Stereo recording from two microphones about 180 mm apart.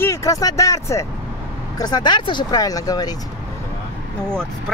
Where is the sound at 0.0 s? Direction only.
15° left (ahead or behind).